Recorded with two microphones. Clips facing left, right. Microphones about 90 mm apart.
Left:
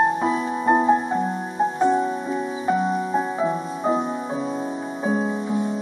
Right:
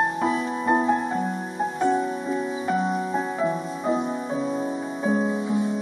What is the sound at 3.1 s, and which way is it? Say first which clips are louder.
Music: left 2 dB; 20° left (ahead or behind).